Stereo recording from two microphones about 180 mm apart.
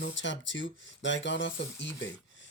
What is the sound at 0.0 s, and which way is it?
Speech, 90° left.